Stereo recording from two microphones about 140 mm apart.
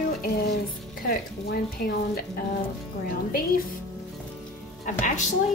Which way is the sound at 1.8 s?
90° left.